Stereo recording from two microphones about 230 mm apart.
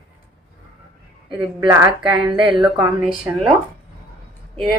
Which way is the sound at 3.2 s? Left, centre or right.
Centre.